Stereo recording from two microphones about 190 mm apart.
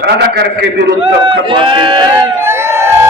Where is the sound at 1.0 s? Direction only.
25° right (ahead or behind).